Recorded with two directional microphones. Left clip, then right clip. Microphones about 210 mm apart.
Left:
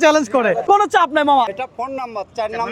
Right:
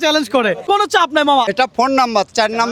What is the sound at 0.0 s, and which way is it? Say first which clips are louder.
Speech: left 1 dB; 15° right (ahead or behind).